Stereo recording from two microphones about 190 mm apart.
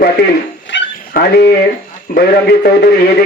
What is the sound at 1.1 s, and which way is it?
A man's voice, 55° left (ahead or behind).